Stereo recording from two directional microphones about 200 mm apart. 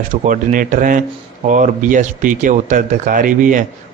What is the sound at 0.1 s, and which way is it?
Speech, 40° right (ahead or behind).